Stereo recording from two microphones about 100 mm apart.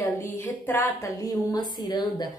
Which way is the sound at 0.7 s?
20° left (ahead or behind).